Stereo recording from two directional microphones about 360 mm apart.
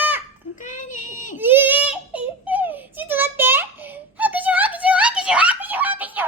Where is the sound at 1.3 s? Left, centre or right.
Centre.